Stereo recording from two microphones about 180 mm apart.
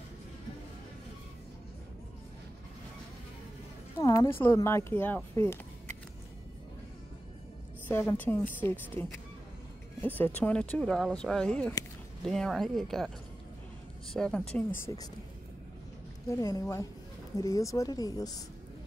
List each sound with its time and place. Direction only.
4.0 s speech: 15° left (ahead or behind)
7.9 s speech: 10° left (ahead or behind)
10.0 s speech: 10° left (ahead or behind)
14.1 s speech: 5° left (ahead or behind)
16.3 s speech: 15° left (ahead or behind)